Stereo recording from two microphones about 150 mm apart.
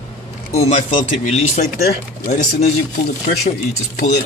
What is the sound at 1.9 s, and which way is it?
Speech, 90° left.